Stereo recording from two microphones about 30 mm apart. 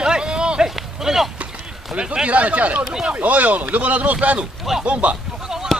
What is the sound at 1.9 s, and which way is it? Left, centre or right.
Speech, right.